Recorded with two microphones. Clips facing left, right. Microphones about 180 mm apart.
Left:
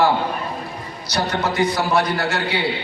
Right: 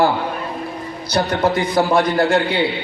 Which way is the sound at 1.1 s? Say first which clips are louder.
Right 4 dB; 55° right (ahead or behind).